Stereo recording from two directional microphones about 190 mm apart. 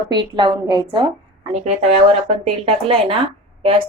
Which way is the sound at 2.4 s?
30° right (ahead or behind).